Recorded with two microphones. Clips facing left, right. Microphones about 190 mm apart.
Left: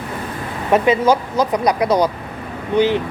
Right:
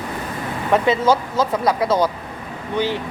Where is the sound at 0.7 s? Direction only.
15° left (ahead or behind).